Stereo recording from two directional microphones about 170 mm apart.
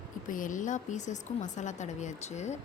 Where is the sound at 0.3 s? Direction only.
50° left (ahead or behind).